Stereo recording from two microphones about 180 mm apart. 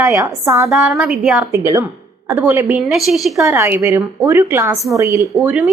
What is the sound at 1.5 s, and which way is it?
A woman's voice, 15° right (ahead or behind).